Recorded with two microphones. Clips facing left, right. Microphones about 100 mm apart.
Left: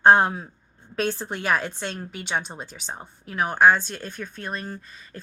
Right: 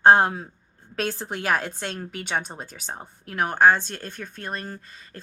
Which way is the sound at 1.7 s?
45° right (ahead or behind).